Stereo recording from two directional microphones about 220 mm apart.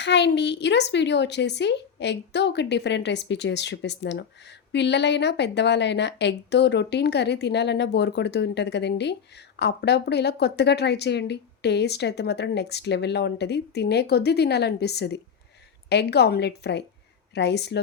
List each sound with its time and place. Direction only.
0.0 s a woman's voice: 50° left (ahead or behind)